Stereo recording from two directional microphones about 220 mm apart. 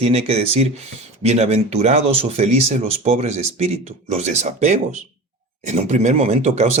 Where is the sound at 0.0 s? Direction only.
25° right (ahead or behind).